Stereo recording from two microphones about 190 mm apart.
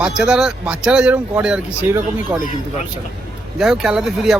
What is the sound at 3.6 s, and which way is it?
Speech, centre (ahead or behind).